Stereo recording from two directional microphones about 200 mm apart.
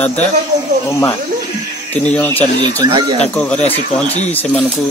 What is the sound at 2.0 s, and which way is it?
Speech, 10° left (ahead or behind).